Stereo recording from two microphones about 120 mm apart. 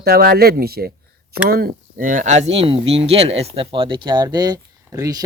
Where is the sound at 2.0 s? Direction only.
90° right.